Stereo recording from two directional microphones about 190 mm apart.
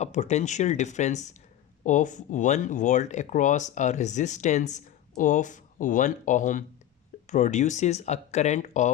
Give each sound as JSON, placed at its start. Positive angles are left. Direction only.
{"t": 0.0, "sound": "speech", "side_deg": 35}